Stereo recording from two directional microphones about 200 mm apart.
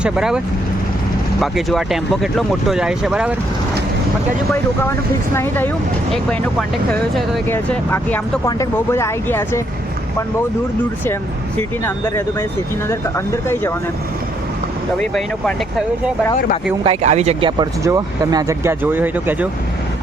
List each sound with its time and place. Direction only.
0.0 s speech: 5° right (ahead or behind)
4.9 s speech: 10° left (ahead or behind)
11.0 s speech: 10° left (ahead or behind)
16.8 s speech: 30° right (ahead or behind)
17.6 s speech: 15° right (ahead or behind)